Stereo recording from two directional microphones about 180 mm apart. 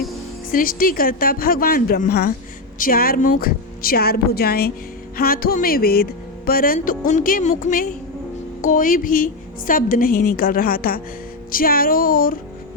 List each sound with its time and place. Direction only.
0.5 s a woman's voice: 50° left (ahead or behind)